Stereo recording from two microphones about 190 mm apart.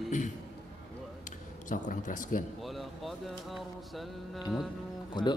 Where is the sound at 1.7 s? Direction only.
45° left (ahead or behind).